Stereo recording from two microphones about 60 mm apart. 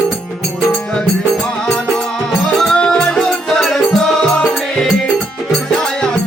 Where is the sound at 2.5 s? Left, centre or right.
Centre.